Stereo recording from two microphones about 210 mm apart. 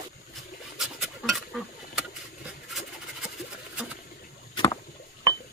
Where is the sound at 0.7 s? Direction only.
Centre (ahead or behind).